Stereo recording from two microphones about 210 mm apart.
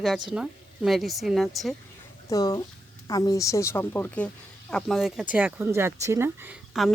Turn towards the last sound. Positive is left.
turn(degrees=-5)  # may be behind; listen again after turning